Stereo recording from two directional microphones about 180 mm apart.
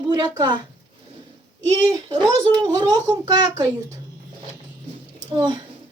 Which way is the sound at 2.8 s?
20° right (ahead or behind).